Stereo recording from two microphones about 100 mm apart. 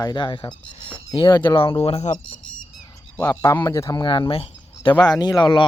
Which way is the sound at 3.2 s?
30° left (ahead or behind).